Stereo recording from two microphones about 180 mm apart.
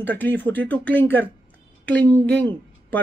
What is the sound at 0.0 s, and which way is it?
Speech, 10° left (ahead or behind).